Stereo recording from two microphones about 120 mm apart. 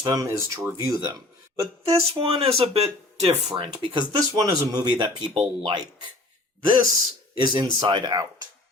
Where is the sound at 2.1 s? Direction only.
50° right (ahead or behind).